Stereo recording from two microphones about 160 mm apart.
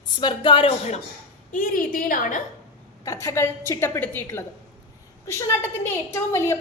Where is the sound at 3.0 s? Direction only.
20° left (ahead or behind).